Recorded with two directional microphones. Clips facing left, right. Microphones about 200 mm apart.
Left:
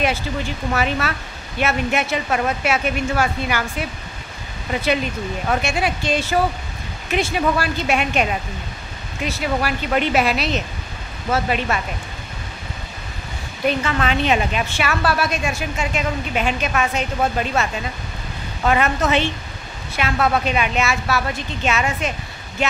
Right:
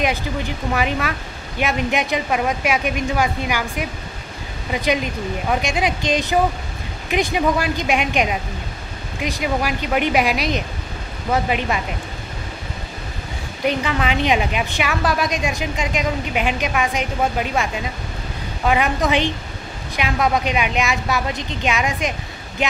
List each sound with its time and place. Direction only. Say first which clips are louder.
0.7 s a woman's voice: even; 15° right (ahead or behind)
13.7 s a woman's voice: even; 10° right (ahead or behind)